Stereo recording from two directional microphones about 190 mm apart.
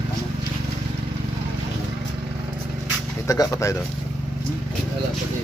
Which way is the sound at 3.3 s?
15° left (ahead or behind).